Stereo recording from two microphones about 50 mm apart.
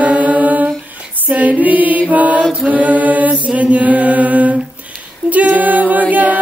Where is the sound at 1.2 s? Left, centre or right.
Right.